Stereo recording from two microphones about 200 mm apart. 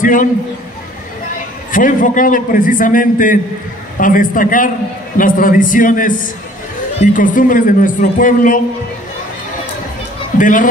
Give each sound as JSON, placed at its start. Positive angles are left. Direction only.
{"t": 0.0, "sound": "a man's voice", "side_deg": 40}
{"t": 1.7, "sound": "a man's voice", "side_deg": 40}
{"t": 10.3, "sound": "speech", "side_deg": 40}